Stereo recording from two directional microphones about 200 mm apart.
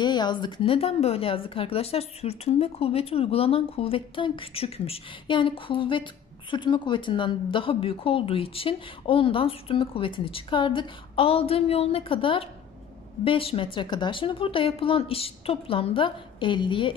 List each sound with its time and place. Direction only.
0.0 s speech: 20° left (ahead or behind)